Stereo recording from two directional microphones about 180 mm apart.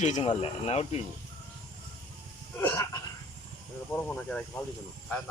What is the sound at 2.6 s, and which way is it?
Throat clearing, 15° left (ahead or behind).